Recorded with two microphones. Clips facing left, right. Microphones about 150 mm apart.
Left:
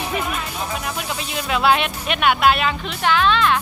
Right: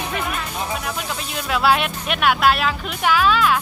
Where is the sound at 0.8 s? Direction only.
Centre (ahead or behind).